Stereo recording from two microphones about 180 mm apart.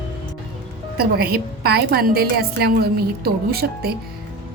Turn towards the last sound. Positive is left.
turn(degrees=-60)  # may be behind; listen again after turning